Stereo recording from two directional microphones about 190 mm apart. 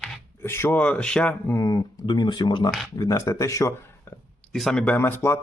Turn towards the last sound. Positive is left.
turn(degrees=10)  # may be behind; listen again after turning